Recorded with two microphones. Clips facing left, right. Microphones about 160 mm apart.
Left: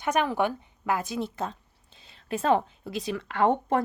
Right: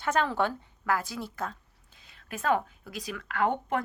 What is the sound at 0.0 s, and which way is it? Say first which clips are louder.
Speech: left 2 dB; 15° left (ahead or behind).